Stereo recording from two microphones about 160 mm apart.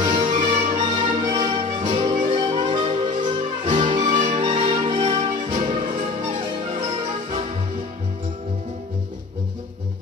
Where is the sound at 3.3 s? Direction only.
50° right (ahead or behind).